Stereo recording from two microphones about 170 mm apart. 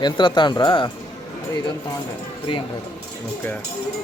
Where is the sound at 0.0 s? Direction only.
25° left (ahead or behind).